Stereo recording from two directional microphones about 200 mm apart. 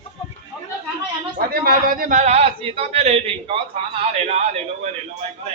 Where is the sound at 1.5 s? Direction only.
45° right (ahead or behind).